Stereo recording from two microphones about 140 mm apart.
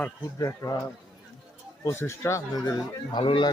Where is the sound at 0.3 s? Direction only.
25° left (ahead or behind).